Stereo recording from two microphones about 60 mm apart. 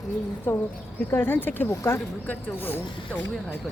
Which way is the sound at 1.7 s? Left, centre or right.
Left.